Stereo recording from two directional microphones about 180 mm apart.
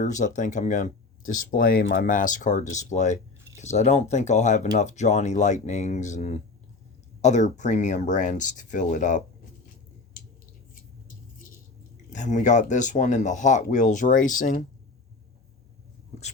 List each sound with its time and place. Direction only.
0.0 s speech: 45° left (ahead or behind)
12.1 s speech: 40° left (ahead or behind)